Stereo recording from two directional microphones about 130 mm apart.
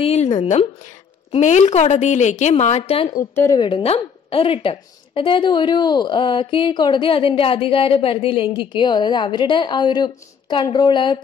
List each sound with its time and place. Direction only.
0.0 s a woman's voice: 55° left (ahead or behind)
2.8 s speech: 45° left (ahead or behind)
3.2 s a woman's voice: 25° left (ahead or behind)
3.5 s a woman's voice: 40° left (ahead or behind)